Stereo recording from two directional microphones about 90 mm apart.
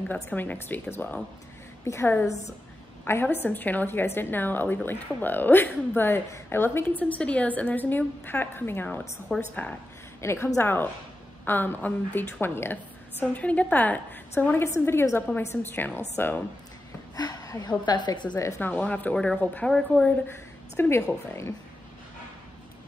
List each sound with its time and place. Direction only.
0.1 s a woman's voice: 20° left (ahead or behind)
10.2 s a woman's voice: 30° left (ahead or behind)
17.1 s a woman's voice: 40° left (ahead or behind)
18.6 s a woman's voice: 20° left (ahead or behind)
20.8 s a woman's voice: 25° left (ahead or behind)